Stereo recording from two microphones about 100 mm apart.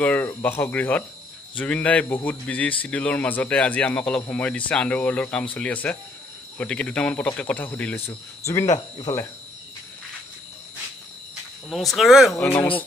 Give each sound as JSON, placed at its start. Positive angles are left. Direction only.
{"t": 0.0, "sound": "speech", "side_deg": 15}
{"t": 8.1, "sound": "speech", "side_deg": 30}
{"t": 8.7, "sound": "speech", "side_deg": 45}
{"t": 11.7, "sound": "speech", "side_deg": 0}